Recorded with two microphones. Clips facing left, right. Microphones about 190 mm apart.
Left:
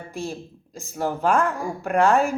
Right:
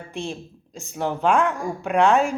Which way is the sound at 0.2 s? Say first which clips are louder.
Even; 5° left (ahead or behind).